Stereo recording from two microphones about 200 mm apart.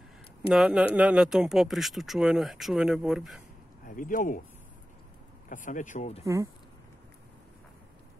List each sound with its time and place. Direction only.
0.5 s speech: 5° right (ahead or behind)
3.8 s speech: 45° left (ahead or behind)
5.5 s speech: 40° left (ahead or behind)
6.2 s speech: 15° right (ahead or behind)